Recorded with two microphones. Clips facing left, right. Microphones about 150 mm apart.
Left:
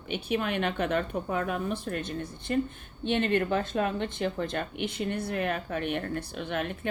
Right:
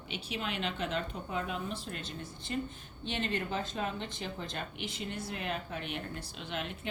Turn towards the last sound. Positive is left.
turn(degrees=55)  # may be behind; listen again after turning